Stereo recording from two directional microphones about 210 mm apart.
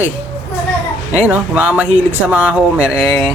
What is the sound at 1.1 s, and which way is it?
Speech, 5° right (ahead or behind).